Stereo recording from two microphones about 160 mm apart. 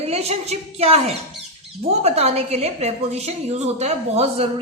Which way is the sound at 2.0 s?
40° right (ahead or behind).